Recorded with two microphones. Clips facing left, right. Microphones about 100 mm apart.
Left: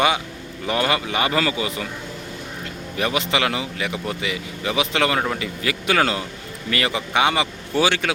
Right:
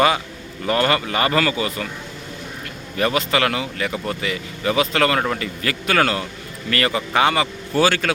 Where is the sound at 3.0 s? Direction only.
15° left (ahead or behind).